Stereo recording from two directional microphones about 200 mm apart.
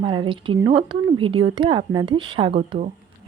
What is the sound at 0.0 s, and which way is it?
Speech, 25° right (ahead or behind).